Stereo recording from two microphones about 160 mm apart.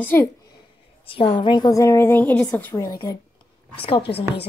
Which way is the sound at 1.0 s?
35° left (ahead or behind).